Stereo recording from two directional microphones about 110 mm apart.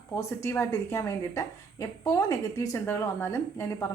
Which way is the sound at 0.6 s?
25° left (ahead or behind).